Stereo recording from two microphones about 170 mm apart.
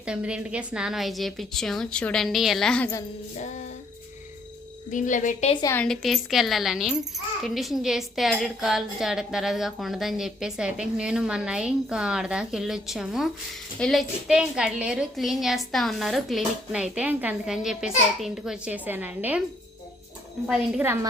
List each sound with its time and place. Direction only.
0.0 s a woman's voice: 5° right (ahead or behind)
3.3 s speech: 45° left (ahead or behind)
4.9 s speech: 50° left (ahead or behind)
5.7 s a woman's voice: 5° left (ahead or behind)
20.5 s a woman's voice: 5° right (ahead or behind)